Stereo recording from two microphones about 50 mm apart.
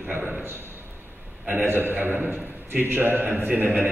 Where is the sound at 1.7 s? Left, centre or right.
Right.